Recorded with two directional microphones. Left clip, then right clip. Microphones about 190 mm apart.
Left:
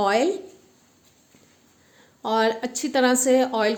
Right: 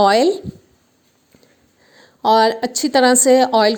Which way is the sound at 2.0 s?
40° right (ahead or behind).